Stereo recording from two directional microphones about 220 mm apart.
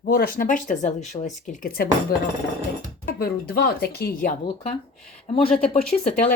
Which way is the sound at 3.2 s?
45° left (ahead or behind).